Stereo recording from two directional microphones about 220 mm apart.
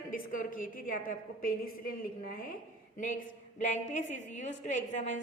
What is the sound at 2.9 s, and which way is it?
A woman's voice, 35° left (ahead or behind).